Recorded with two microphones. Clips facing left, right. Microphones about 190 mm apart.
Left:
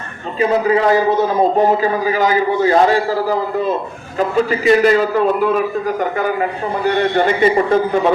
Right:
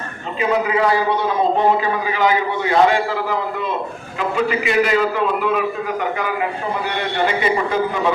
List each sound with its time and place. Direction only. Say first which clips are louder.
0.3 s a man's voice: left 4 dB; 40° left (ahead or behind)
6.8 s a man's voice: left 8 dB; 50° left (ahead or behind)